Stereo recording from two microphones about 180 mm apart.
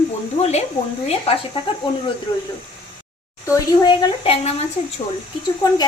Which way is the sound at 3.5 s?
25° left (ahead or behind).